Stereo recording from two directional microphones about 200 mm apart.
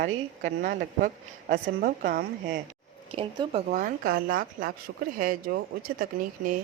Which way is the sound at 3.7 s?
45° right (ahead or behind).